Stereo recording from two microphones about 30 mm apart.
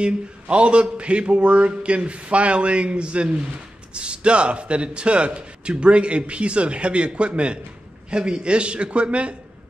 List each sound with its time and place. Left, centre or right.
0.0 s a man's voice: right